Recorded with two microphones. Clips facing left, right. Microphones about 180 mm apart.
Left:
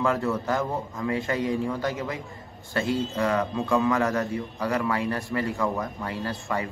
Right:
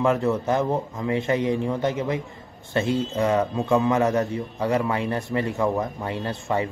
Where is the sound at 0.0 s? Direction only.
20° right (ahead or behind).